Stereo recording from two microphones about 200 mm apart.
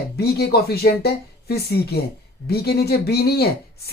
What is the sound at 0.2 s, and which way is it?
Speech, 50° left (ahead or behind).